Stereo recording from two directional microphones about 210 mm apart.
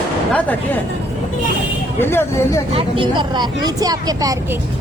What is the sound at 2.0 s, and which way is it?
Speech, 10° left (ahead or behind).